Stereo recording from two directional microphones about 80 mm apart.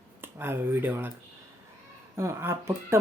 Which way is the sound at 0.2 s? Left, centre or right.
Right.